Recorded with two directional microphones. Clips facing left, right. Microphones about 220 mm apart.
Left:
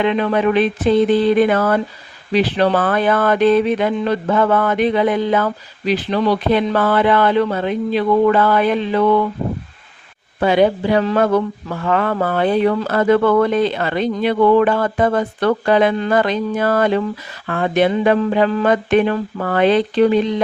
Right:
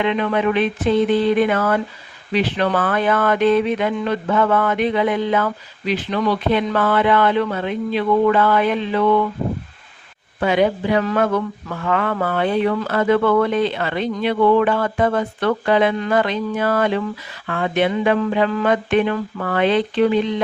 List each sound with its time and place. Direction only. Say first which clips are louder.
0.0 s speech: left 3 dB; 35° left (ahead or behind)
10.4 s speech: left 3 dB; 35° left (ahead or behind)